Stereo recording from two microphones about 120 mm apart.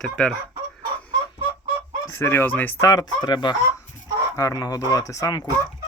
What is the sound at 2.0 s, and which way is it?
Speech, 20° left (ahead or behind).